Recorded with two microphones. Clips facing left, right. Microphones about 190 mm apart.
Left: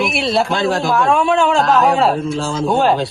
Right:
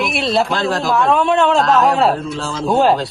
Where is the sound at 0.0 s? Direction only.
Centre (ahead or behind).